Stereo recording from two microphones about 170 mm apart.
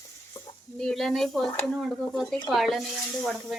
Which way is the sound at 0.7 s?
Centre (ahead or behind).